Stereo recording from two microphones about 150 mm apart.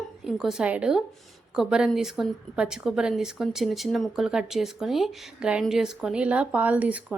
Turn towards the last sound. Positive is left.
turn(degrees=-10)  # may be behind; listen again after turning